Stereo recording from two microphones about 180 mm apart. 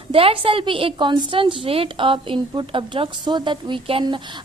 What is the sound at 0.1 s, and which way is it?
A woman's voice, 30° right (ahead or behind).